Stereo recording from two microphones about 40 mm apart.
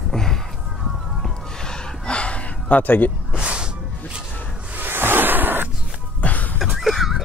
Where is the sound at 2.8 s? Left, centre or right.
Left.